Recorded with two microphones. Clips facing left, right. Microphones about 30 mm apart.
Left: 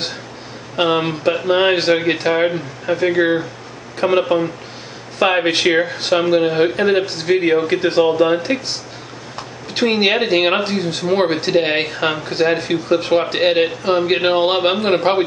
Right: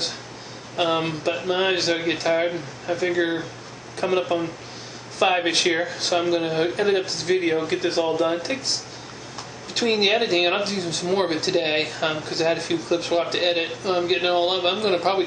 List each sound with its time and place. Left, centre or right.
0.7 s speech: left
9.8 s speech: left